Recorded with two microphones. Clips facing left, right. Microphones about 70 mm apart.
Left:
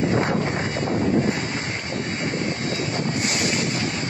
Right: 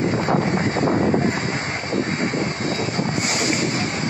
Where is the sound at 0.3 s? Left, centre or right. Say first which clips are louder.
Right 4 dB; right.